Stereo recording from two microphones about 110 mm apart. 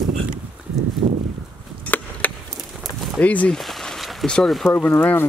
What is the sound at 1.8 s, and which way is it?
Chop, 15° left (ahead or behind).